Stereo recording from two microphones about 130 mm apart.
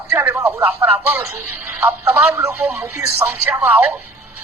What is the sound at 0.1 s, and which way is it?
A man's voice, 15° right (ahead or behind).